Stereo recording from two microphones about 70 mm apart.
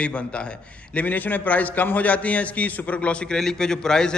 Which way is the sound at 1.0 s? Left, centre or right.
Left.